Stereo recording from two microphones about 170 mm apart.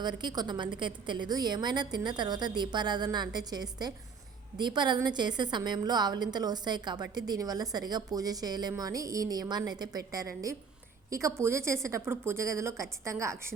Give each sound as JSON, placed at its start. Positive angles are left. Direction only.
{"t": 0.0, "sound": "a woman's voice", "side_deg": -25}